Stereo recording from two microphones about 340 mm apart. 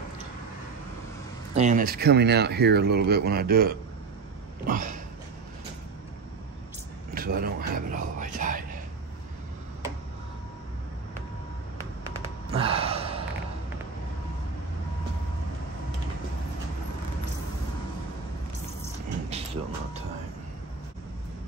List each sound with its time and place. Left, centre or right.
1.5 s speech: right
7.2 s a sound: right
12.0 s sigh: centre